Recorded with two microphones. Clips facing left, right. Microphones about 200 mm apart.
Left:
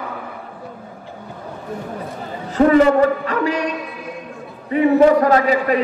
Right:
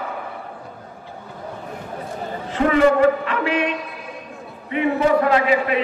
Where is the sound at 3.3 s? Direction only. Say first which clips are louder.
Left 1 dB; 40° left (ahead or behind).